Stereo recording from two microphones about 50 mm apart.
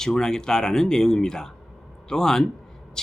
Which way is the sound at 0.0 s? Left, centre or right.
Centre.